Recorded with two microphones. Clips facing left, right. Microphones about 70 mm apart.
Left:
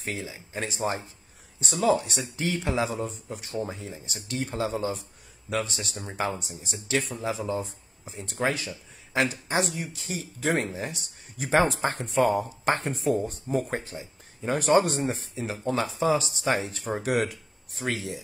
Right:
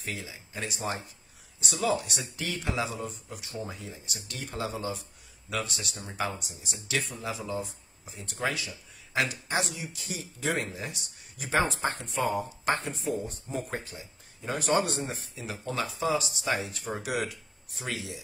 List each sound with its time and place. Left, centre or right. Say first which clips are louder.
0.0 s speech: left 4 dB; left
9.6 s speech: left 6 dB; left
13.7 s speech: left 4 dB; left